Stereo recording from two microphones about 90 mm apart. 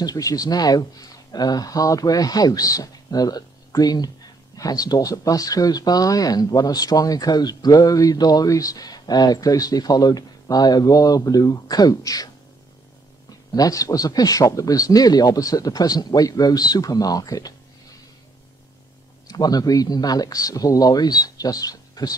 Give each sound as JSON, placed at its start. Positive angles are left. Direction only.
{"t": 0.0, "sound": "speech", "side_deg": 45}
{"t": 13.5, "sound": "speech", "side_deg": 40}
{"t": 19.2, "sound": "speech", "side_deg": 45}